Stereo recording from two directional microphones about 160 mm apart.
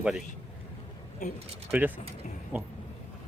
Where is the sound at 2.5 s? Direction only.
10° right (ahead or behind).